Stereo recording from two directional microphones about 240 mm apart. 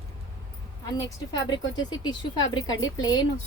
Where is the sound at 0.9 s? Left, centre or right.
Centre.